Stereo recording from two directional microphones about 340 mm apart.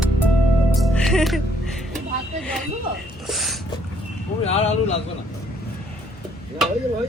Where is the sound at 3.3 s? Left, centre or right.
Centre.